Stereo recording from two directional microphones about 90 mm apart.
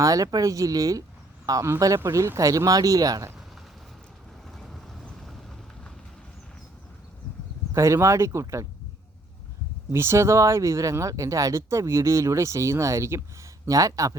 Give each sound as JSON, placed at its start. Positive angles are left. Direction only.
{"t": 0.0, "sound": "speech", "side_deg": -40}
{"t": 2.0, "sound": "speech", "side_deg": -30}
{"t": 4.5, "sound": "vehicle", "side_deg": 0}
{"t": 7.7, "sound": "speech", "side_deg": -30}
{"t": 9.9, "sound": "speech", "side_deg": -30}